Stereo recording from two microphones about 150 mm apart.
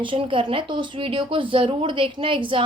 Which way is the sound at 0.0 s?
35° right (ahead or behind).